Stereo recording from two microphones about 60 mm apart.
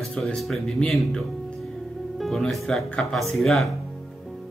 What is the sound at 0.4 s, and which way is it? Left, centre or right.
Speech, centre.